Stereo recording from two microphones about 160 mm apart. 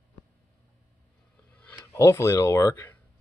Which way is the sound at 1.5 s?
10° left (ahead or behind).